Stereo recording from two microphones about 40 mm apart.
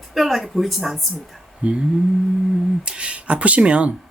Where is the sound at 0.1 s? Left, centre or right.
Centre.